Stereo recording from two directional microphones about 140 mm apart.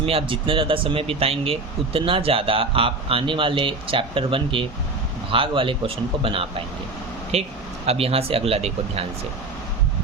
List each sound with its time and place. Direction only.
0.0 s speech: 45° right (ahead or behind)